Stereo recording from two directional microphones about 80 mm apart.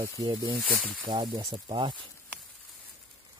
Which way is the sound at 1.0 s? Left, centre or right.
Right.